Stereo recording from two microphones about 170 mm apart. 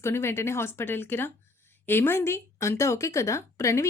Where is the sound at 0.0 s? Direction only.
15° left (ahead or behind).